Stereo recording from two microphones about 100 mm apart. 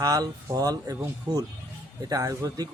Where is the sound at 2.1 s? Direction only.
35° right (ahead or behind).